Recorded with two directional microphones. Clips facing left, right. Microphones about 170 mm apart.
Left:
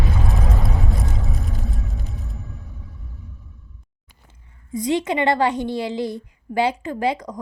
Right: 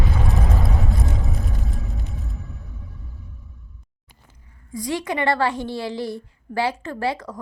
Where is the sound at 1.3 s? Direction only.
Centre (ahead or behind).